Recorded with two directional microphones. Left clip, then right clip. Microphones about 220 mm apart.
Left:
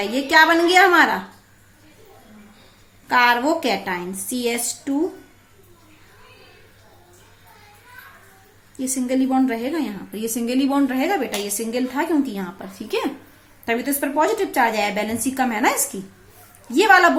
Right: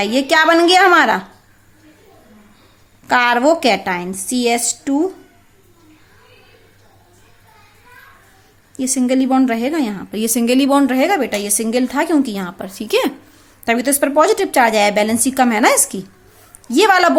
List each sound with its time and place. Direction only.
0.0 s a woman's voice: 45° right (ahead or behind)
3.1 s a woman's voice: 45° right (ahead or behind)
8.8 s a woman's voice: 45° right (ahead or behind)